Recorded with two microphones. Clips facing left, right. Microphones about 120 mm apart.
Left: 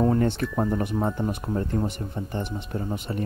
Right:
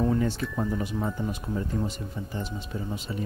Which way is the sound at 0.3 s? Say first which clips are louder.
Left 4 dB; 55° left (ahead or behind).